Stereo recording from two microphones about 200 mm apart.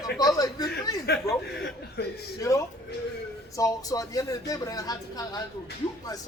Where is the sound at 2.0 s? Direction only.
55° left (ahead or behind).